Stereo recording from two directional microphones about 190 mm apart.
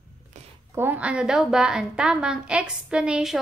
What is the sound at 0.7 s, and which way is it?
A woman's voice, 10° right (ahead or behind).